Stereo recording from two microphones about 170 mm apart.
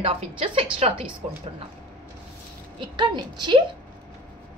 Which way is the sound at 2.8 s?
25° right (ahead or behind).